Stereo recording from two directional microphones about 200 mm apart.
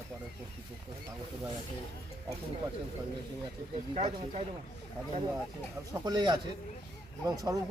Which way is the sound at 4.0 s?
30° right (ahead or behind).